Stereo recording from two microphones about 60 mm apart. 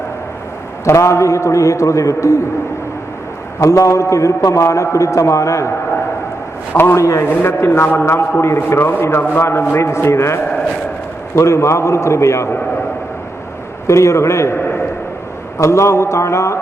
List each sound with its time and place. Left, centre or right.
0.9 s a man's voice: left
3.6 s a man's voice: left
6.9 s a man's voice: left
7.3 s a man's voice: left
13.8 s a man's voice: left
15.5 s a man's voice: left